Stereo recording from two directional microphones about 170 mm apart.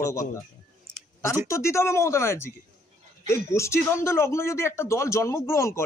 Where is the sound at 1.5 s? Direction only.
15° left (ahead or behind).